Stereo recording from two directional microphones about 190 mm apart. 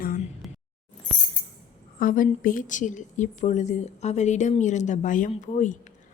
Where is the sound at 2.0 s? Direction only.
45° left (ahead or behind).